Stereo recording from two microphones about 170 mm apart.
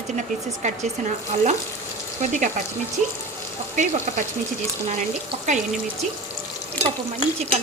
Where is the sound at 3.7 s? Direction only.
45° right (ahead or behind).